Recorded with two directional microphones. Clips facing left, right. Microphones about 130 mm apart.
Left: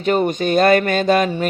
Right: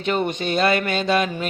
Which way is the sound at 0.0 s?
45° left (ahead or behind).